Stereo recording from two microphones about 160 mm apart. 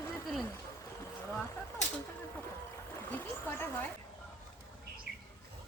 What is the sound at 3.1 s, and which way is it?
Speech, 10° left (ahead or behind).